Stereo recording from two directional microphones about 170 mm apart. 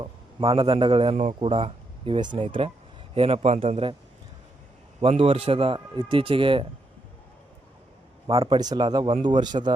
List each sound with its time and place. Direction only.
0.0 s a man's voice: 30° right (ahead or behind)
4.9 s a man's voice: 35° right (ahead or behind)
8.3 s speech: 20° right (ahead or behind)